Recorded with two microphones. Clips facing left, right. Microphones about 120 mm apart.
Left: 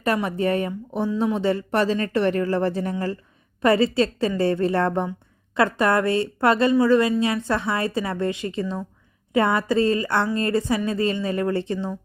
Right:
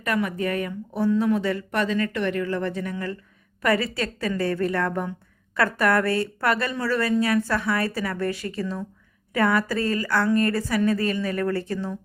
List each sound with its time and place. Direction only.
0.0 s a woman's voice: 30° left (ahead or behind)